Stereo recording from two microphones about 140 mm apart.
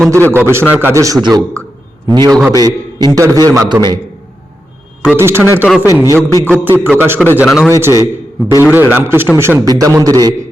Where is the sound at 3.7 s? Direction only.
15° right (ahead or behind).